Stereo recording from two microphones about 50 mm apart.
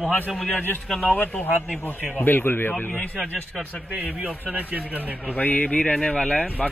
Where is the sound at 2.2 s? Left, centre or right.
Left.